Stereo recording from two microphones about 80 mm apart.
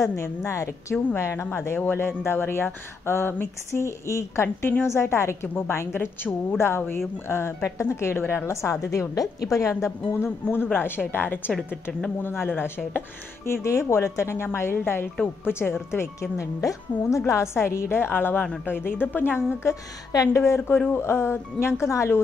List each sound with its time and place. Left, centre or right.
0.0 s a woman's voice: left
11.5 s a woman's voice: centre
12.2 s a woman's voice: left
13.5 s a woman's voice: left